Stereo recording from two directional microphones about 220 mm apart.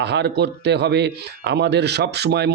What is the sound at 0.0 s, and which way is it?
A man's voice, 50° right (ahead or behind).